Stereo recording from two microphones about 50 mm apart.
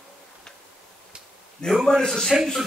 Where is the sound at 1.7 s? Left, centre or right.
Centre.